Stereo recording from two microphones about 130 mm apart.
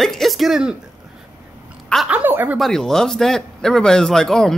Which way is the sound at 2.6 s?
5° left (ahead or behind).